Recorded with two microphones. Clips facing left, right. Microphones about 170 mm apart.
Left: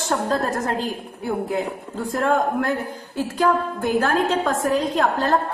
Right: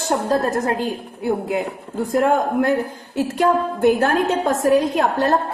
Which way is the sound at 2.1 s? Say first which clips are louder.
Right 3 dB; 20° right (ahead or behind).